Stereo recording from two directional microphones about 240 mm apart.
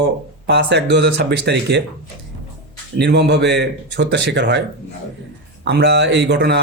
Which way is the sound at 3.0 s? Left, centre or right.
Right.